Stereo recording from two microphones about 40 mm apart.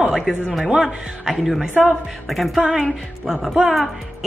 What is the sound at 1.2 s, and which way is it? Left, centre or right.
Speech, centre.